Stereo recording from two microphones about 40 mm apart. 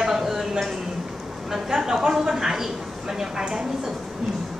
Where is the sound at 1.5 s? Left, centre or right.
Centre.